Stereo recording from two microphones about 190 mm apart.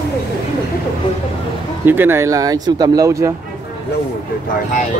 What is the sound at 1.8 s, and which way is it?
Speech, 10° right (ahead or behind).